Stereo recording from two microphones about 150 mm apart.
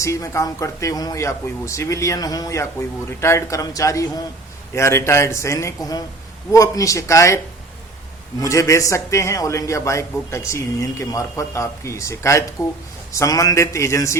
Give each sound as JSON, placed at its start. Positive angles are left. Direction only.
{"t": 0.0, "sound": "speech", "side_deg": 20}
{"t": 8.4, "sound": "speech", "side_deg": 20}